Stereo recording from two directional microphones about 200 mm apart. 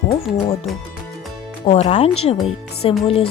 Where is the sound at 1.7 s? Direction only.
35° left (ahead or behind).